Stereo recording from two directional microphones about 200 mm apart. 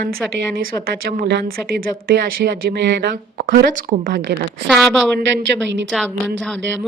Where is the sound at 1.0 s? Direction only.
50° right (ahead or behind).